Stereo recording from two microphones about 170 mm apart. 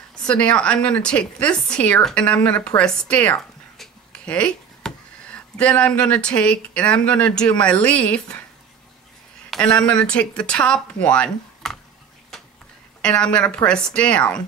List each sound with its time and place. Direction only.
0.1 s a woman's voice: 5° left (ahead or behind)
9.5 s speech: 5° left (ahead or behind)
13.0 s speech: 5° left (ahead or behind)